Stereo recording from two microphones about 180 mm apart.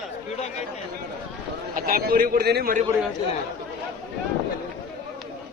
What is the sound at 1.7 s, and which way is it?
A man's voice, 55° right (ahead or behind).